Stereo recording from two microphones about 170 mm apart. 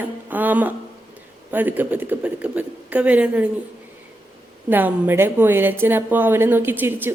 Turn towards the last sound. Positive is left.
turn(degrees=-10)  # may be behind; listen again after turning